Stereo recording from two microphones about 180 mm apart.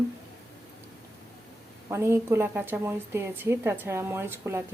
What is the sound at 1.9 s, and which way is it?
A woman's voice, 15° right (ahead or behind).